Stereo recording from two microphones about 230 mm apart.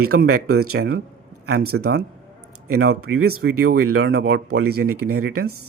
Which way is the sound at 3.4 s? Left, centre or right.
Right.